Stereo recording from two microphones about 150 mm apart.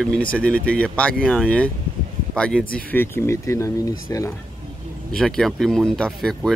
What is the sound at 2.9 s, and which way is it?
Speech, 15° left (ahead or behind).